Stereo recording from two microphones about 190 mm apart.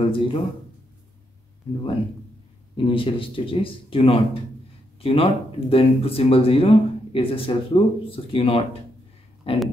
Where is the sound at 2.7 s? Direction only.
30° left (ahead or behind).